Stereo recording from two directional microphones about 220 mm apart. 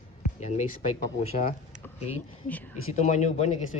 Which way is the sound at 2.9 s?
30° left (ahead or behind).